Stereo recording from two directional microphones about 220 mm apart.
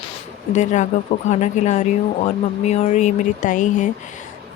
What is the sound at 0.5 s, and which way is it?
Speech, 35° left (ahead or behind).